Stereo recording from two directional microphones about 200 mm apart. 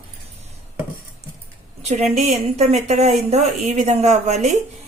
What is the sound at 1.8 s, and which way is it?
Speech, 35° right (ahead or behind).